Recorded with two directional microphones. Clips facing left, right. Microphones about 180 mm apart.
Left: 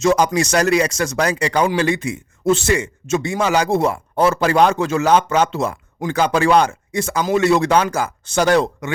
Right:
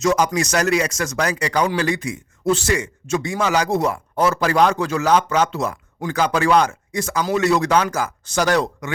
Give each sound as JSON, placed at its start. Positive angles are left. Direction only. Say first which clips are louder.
{"t": 0.0, "sound": "a man's voice", "louder": "left 3 dB", "side_deg": 30}